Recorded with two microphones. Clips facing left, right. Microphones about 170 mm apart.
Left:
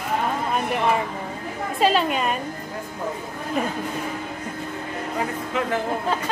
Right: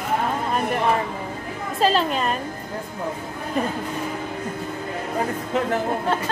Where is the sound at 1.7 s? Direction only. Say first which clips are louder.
Even; 5° left (ahead or behind).